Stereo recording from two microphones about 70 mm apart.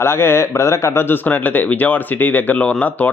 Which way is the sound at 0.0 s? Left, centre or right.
Left.